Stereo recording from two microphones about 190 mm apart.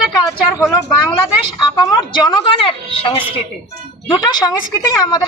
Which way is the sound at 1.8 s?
25° left (ahead or behind).